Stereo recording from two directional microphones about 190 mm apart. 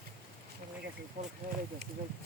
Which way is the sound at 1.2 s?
35° right (ahead or behind).